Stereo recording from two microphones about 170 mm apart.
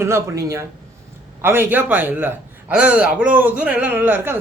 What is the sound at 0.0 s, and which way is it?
Speech, 15° right (ahead or behind).